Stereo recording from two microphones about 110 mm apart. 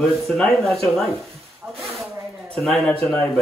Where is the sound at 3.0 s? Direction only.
20° left (ahead or behind).